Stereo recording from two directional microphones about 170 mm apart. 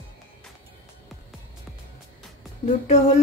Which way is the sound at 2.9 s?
40° left (ahead or behind).